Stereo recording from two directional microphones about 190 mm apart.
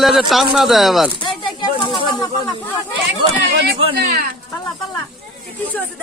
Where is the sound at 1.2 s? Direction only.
25° left (ahead or behind).